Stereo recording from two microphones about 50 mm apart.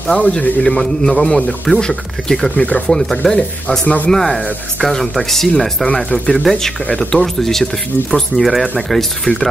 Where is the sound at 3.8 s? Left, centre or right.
Left.